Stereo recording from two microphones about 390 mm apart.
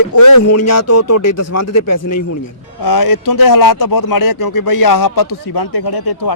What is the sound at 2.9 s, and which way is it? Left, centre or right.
Speech, left.